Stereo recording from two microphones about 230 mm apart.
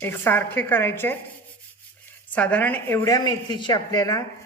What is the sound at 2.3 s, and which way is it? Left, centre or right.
Speech, centre.